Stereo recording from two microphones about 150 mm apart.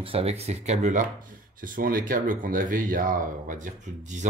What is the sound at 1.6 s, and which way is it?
Speech, 70° right (ahead or behind).